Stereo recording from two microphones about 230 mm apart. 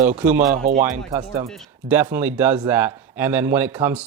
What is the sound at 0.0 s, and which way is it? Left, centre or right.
Speech, right.